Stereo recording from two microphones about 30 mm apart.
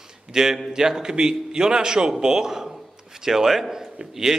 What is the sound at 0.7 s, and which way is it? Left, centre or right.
A man's voice, right.